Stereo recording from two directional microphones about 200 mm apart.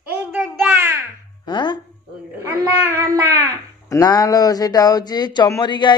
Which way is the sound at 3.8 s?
15° left (ahead or behind).